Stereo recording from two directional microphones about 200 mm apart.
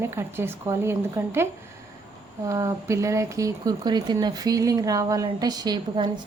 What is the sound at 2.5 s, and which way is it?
A woman's voice, 15° right (ahead or behind).